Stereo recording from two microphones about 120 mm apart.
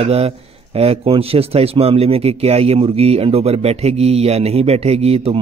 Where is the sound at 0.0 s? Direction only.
60° right (ahead or behind).